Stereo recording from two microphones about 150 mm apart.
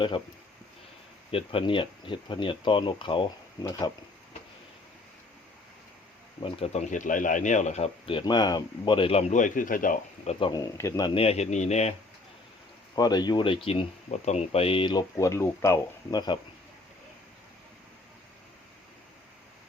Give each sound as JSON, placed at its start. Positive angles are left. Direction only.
{"t": 0.1, "sound": "speech", "side_deg": 30}
{"t": 6.4, "sound": "speech", "side_deg": 45}
{"t": 8.2, "sound": "speech", "side_deg": 25}
{"t": 9.3, "sound": "speech", "side_deg": 60}
{"t": 10.5, "sound": "speech", "side_deg": 20}
{"t": 11.1, "sound": "speech", "side_deg": 40}
{"t": 13.0, "sound": "speech", "side_deg": 25}
{"t": 15.2, "sound": "speech", "side_deg": 20}